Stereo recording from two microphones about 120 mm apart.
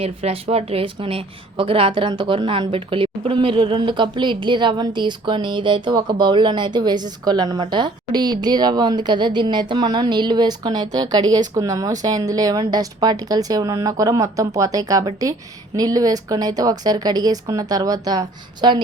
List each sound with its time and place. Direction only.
0.0 s a woman's voice: 55° right (ahead or behind); by 18.8 s 35° right (ahead or behind)